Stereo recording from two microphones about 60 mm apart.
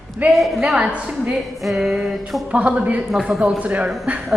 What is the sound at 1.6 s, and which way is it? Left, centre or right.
A woman's voice, centre.